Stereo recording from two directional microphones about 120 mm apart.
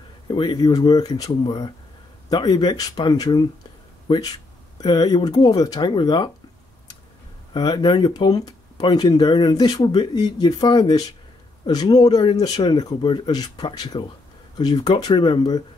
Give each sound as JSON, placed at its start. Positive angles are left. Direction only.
{"t": 0.3, "sound": "speech", "side_deg": 40}
{"t": 7.5, "sound": "speech", "side_deg": 35}